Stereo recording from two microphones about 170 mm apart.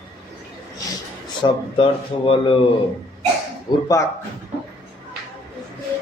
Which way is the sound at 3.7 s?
25° left (ahead or behind).